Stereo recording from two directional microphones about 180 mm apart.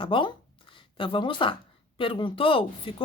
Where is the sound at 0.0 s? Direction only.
25° left (ahead or behind).